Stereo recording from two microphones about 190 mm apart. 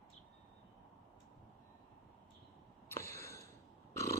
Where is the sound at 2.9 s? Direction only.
15° left (ahead or behind).